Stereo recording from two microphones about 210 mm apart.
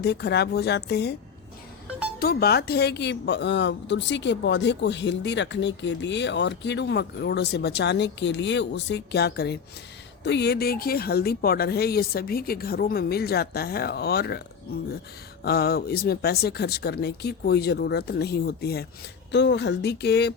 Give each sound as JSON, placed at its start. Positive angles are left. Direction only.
{"t": 0.0, "sound": "speech", "side_deg": 50}
{"t": 2.1, "sound": "speech", "side_deg": 45}